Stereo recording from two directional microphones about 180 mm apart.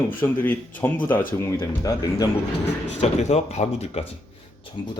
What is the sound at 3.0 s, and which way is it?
Speech, 40° left (ahead or behind).